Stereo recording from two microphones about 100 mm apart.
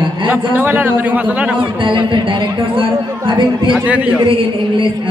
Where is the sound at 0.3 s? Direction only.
20° right (ahead or behind).